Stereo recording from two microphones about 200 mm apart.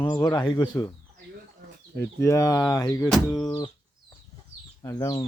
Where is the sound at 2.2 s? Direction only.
15° left (ahead or behind).